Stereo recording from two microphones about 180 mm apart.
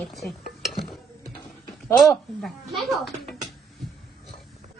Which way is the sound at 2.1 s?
Centre (ahead or behind).